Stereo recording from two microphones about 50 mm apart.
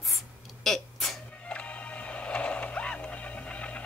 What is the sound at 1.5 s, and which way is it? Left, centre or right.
Music, left.